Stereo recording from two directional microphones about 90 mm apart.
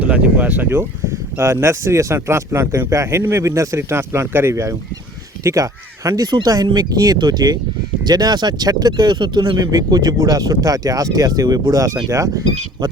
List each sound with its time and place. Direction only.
0.0 s speech: 15° right (ahead or behind); by 12.3 s 40° right (ahead or behind)